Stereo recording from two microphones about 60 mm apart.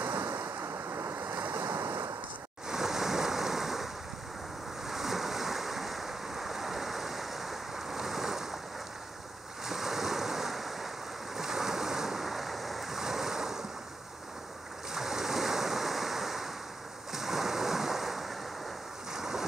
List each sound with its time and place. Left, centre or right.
0.0 s waves: right
1.2 s waves: right
2.7 s waves: centre
9.7 s waves: centre
15.0 s ocean: centre
17.1 s waves: centre
19.1 s a sound: centre